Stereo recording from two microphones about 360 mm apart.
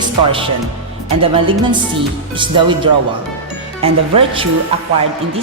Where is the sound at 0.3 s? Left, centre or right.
Centre.